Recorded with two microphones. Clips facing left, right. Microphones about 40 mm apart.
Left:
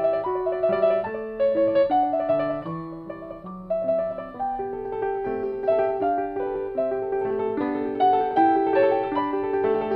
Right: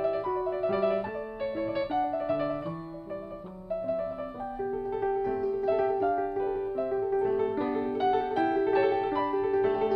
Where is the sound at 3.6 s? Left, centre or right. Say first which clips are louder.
Left 7 dB; centre.